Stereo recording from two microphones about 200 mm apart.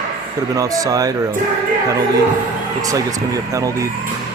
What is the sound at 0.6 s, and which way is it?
Speech, 15° right (ahead or behind).